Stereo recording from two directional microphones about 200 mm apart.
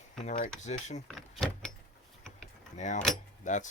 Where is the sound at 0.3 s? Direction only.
35° left (ahead or behind).